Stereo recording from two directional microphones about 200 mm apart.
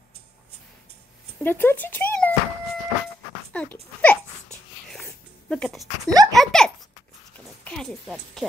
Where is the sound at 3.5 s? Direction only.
5° left (ahead or behind).